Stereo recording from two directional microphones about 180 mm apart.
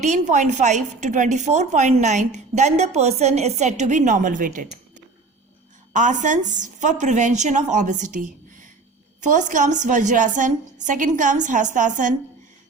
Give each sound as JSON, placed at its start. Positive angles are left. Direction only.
{"t": 0.0, "sound": "a woman's voice", "side_deg": -40}
{"t": 5.9, "sound": "a woman's voice", "side_deg": -45}